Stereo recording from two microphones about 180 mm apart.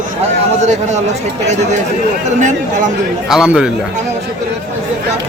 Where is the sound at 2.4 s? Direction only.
45° right (ahead or behind).